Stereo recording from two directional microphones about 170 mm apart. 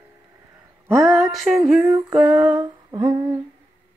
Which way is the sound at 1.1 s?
Centre (ahead or behind).